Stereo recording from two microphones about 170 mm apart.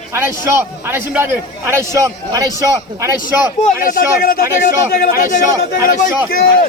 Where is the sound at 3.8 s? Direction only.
60° left (ahead or behind).